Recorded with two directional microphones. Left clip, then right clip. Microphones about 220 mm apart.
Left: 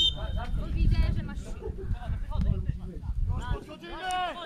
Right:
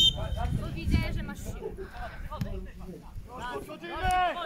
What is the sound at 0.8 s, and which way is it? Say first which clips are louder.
Speech: right 3 dB; 20° right (ahead or behind).